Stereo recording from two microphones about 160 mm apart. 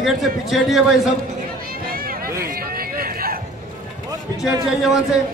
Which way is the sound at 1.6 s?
65° right (ahead or behind).